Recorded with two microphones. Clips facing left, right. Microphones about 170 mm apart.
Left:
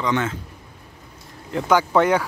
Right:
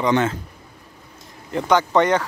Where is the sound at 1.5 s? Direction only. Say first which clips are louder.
Even; 5° left (ahead or behind).